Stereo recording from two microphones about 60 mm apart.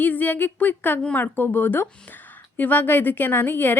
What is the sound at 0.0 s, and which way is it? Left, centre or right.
A woman's voice, left.